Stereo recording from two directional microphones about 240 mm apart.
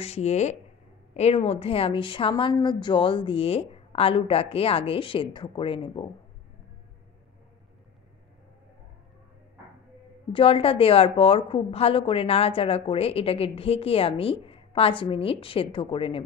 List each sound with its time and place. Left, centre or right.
0.0 s a woman's voice: left
10.3 s a woman's voice: left